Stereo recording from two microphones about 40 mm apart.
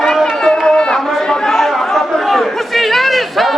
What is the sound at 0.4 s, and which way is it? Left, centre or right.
Chatter, left.